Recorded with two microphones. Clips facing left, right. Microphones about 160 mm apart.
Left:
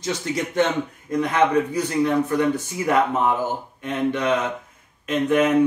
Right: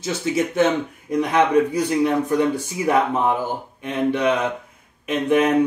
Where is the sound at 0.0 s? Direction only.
5° right (ahead or behind).